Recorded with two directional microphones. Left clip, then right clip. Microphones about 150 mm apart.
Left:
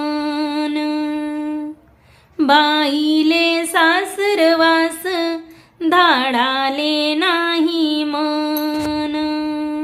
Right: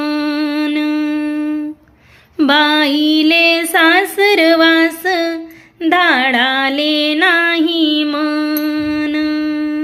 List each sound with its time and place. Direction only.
0.0 s humming: 20° right (ahead or behind)
2.4 s female singing: 20° right (ahead or behind)
5.8 s music: 5° right (ahead or behind)